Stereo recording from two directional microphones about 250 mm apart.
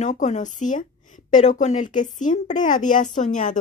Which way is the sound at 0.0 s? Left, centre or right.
Left.